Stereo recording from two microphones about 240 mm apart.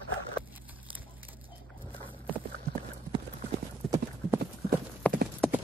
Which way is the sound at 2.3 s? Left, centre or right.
Centre.